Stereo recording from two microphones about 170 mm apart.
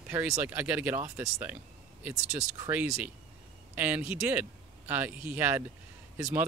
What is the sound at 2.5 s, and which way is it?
Speech, 15° right (ahead or behind).